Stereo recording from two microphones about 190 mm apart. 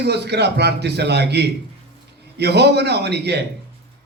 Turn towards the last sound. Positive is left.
turn(degrees=-60)  # may be behind; listen again after turning